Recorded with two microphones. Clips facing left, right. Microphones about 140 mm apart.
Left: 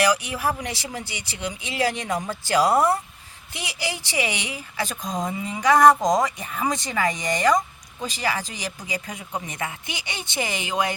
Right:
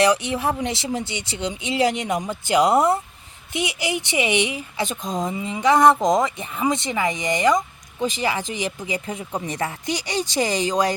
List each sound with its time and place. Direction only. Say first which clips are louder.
0.0 s speech: right 3 dB; 25° right (ahead or behind)
9.5 s speech: right 6 dB; 35° right (ahead or behind)